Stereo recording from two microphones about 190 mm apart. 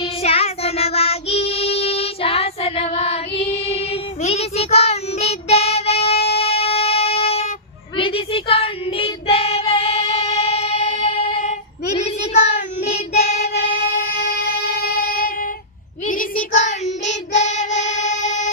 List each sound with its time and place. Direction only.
0.0 s child singing: 30° left (ahead or behind)
6.2 s music: 30° left (ahead or behind)
7.9 s child singing: 30° left (ahead or behind)
13.6 s music: 40° left (ahead or behind)
14.3 s music: 60° left (ahead or behind)
16.0 s child singing: 45° left (ahead or behind)